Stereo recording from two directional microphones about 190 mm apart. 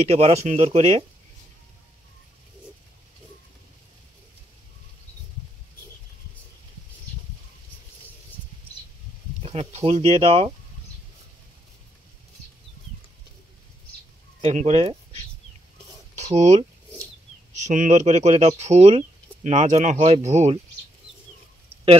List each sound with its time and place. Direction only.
0.0 s speech: 30° right (ahead or behind)
9.4 s speech: 30° right (ahead or behind)
14.4 s speech: 35° right (ahead or behind)